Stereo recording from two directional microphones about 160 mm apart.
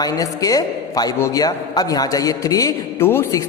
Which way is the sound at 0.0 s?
20° left (ahead or behind).